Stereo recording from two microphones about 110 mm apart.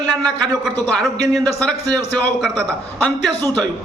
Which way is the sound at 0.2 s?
35° right (ahead or behind).